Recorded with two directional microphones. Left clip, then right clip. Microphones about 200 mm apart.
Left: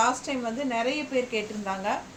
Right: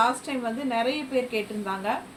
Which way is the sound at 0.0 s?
20° left (ahead or behind).